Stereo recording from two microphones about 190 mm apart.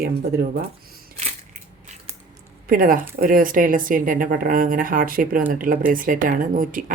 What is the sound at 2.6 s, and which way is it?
Speech, 45° right (ahead or behind).